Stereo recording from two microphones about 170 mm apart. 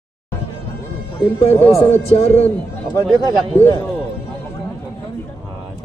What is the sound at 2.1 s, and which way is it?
Speech, 35° left (ahead or behind).